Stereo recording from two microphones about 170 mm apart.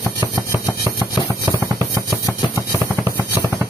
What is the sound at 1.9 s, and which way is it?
Music, 20° left (ahead or behind).